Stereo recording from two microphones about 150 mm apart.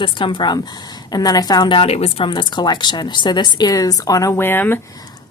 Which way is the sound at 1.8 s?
40° left (ahead or behind).